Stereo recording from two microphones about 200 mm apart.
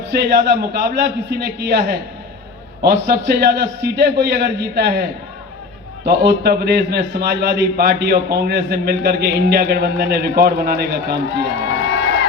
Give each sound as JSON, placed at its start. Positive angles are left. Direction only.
{"t": 0.1, "sound": "a man's voice", "side_deg": -55}
{"t": 6.1, "sound": "a man's voice", "side_deg": -55}